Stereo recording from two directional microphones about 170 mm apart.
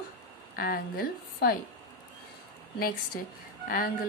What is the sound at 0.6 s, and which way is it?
Speech, 60° left (ahead or behind).